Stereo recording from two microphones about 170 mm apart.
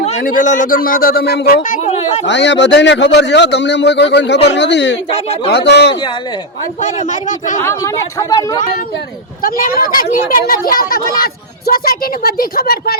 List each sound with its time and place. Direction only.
0.2 s a woman's voice: 50° left (ahead or behind)
1.8 s a sound: 40° left (ahead or behind)
2.2 s a man's voice: 90° left
5.5 s speech: 75° left (ahead or behind)
6.8 s speech: 45° left (ahead or behind)
7.6 s speech: 15° left (ahead or behind)
9.4 s a woman's voice: 55° left (ahead or behind)